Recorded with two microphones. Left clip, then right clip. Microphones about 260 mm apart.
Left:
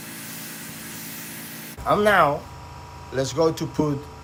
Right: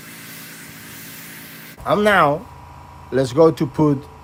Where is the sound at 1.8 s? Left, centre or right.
Right.